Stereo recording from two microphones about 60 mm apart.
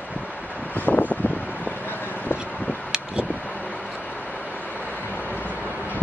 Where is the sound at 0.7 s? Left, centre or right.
Left.